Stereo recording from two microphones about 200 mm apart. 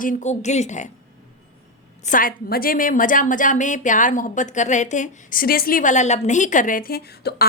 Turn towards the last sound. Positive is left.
turn(degrees=50)  # may be behind; listen again after turning